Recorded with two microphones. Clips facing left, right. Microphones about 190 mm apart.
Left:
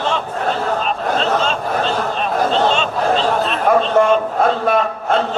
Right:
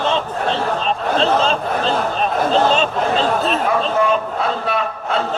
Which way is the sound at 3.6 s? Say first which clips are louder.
Left 7 dB; 50° left (ahead or behind).